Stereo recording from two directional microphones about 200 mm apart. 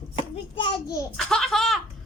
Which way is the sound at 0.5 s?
25° left (ahead or behind).